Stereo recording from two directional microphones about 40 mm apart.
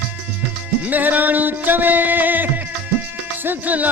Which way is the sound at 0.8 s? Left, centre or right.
Right.